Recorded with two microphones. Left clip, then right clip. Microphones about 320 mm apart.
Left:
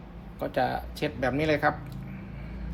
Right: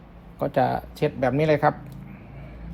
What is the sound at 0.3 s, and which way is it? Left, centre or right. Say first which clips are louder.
Speech: right 5 dB; centre.